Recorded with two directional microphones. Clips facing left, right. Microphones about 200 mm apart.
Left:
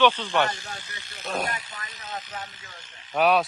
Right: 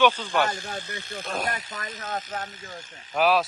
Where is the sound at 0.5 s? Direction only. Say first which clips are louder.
Right 6 dB; 50° right (ahead or behind).